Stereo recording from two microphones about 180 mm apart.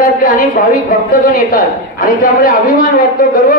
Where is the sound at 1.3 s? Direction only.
55° left (ahead or behind).